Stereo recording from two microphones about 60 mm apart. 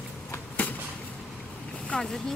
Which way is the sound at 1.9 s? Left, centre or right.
Centre.